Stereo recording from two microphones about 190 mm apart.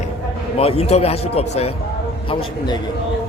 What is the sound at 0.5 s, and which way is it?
A man's voice, 30° left (ahead or behind).